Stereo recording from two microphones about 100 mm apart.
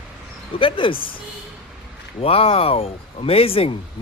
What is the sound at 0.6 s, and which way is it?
Speech, 60° left (ahead or behind).